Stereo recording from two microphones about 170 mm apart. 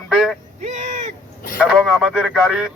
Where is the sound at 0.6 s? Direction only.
45° right (ahead or behind).